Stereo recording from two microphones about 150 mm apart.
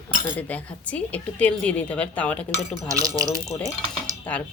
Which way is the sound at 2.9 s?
20° right (ahead or behind).